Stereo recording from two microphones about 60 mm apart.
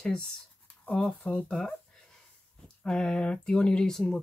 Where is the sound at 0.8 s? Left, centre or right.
Centre.